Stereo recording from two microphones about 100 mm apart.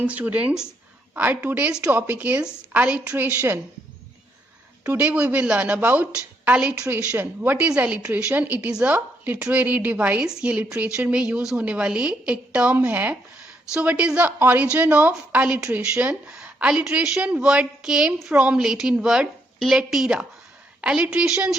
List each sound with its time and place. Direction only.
0.0 s a woman's voice: 15° right (ahead or behind)
4.8 s a woman's voice: 15° right (ahead or behind)